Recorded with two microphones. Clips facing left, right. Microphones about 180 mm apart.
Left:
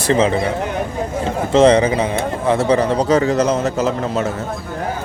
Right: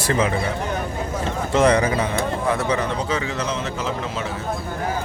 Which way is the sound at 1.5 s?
25° left (ahead or behind).